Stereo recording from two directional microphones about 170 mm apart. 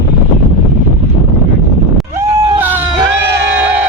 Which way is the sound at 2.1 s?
15° right (ahead or behind).